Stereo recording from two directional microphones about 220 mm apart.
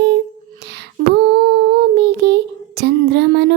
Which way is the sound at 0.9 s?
45° right (ahead or behind).